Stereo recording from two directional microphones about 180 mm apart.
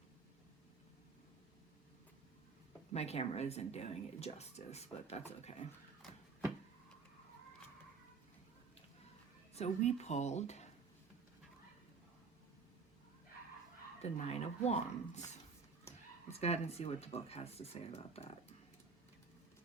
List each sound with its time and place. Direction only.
2.9 s speech: 35° left (ahead or behind)
9.6 s speech: 40° left (ahead or behind)
14.0 s speech: 35° left (ahead or behind)
16.4 s speech: 35° left (ahead or behind)